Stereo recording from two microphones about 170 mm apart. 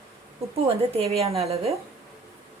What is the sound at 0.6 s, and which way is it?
Speech, 35° right (ahead or behind).